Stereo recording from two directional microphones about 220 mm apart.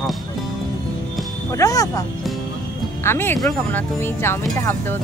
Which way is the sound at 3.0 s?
10° left (ahead or behind).